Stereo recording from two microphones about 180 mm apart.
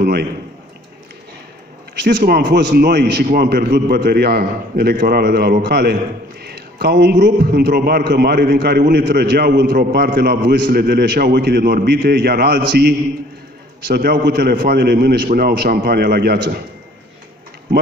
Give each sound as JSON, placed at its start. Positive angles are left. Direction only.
{"t": 0.0, "sound": "a man's voice", "side_deg": -60}
{"t": 2.0, "sound": "a man's voice", "side_deg": -65}